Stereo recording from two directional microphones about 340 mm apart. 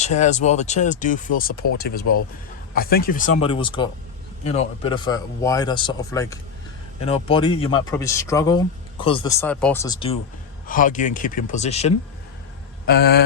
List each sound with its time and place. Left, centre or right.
0.0 s speech: left
2.7 s speech: left